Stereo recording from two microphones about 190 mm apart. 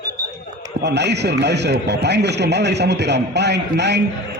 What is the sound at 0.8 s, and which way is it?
A man's voice, 60° right (ahead or behind).